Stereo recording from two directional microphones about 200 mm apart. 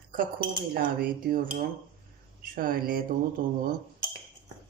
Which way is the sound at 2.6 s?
45° right (ahead or behind).